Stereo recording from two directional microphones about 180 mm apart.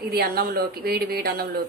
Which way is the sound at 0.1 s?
60° right (ahead or behind).